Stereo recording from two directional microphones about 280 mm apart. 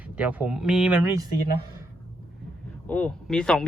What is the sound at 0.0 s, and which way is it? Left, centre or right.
Speech, centre.